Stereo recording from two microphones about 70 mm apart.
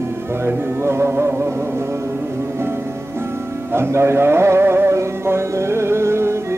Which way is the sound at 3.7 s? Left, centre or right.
Right.